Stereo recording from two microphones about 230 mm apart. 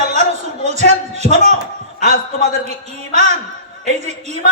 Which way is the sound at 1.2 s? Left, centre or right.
Left.